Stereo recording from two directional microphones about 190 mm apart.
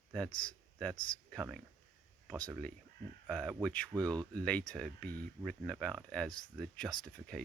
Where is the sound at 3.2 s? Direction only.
5° left (ahead or behind).